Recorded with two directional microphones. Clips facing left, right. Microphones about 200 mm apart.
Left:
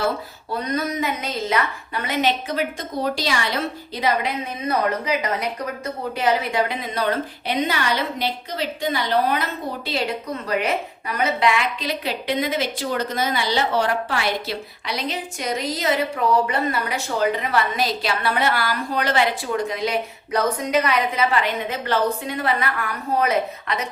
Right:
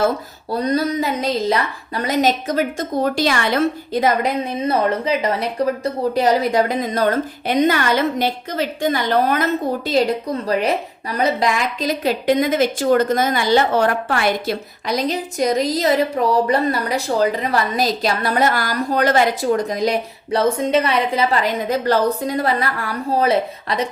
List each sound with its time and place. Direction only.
0.5 s a woman's voice: 35° right (ahead or behind); by 4.3 s 50° right (ahead or behind)
4.6 s a woman's voice: 30° right (ahead or behind)